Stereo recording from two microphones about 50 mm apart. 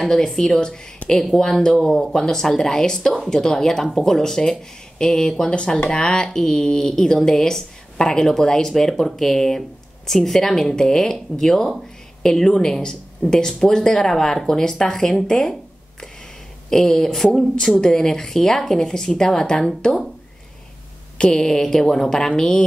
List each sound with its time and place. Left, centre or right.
0.0 s speech: centre
0.9 s a sound: centre
1.3 s speech: centre
16.7 s speech: centre
21.2 s speech: centre